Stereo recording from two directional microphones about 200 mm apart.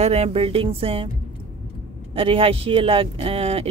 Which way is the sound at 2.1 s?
25° right (ahead or behind).